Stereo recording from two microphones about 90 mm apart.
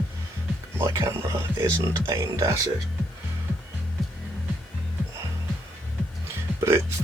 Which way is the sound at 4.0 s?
Centre (ahead or behind).